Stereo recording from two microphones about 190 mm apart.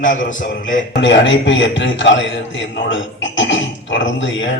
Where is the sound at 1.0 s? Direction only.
70° left (ahead or behind).